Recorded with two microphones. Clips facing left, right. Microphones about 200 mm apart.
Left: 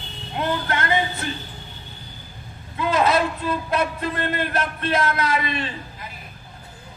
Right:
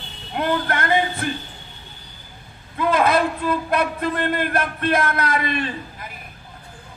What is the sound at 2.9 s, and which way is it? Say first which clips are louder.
Speech: right 1 dB; 55° right (ahead or behind).